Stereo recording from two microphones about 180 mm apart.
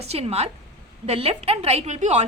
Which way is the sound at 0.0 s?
35° right (ahead or behind).